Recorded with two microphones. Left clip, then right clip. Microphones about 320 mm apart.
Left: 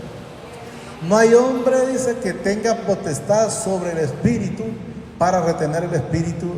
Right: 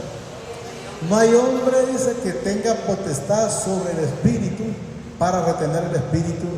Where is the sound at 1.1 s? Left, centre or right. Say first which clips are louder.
Left 2 dB; centre.